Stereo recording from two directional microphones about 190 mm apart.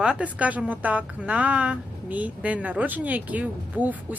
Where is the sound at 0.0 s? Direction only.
5° right (ahead or behind).